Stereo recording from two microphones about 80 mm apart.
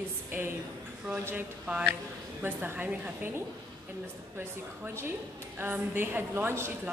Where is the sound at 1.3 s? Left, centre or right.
Centre.